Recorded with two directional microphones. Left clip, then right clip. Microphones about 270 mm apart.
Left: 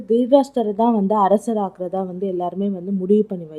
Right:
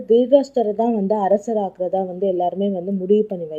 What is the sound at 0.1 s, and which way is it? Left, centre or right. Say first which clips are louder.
Speech: right 1 dB; centre.